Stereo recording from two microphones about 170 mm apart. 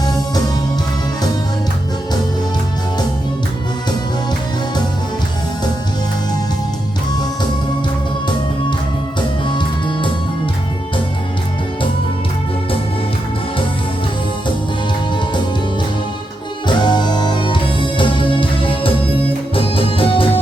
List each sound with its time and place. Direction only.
0.0 s music: 25° left (ahead or behind)
9.5 s music: 30° left (ahead or behind)
15.1 s music: 25° left (ahead or behind)
16.6 s music: 25° left (ahead or behind)